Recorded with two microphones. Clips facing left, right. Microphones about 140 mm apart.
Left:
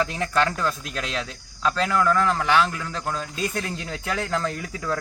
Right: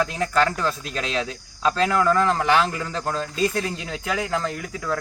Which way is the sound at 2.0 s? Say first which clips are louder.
Right 2 dB; 30° right (ahead or behind).